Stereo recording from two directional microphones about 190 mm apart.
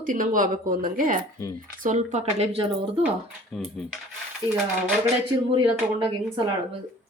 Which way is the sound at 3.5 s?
Centre (ahead or behind).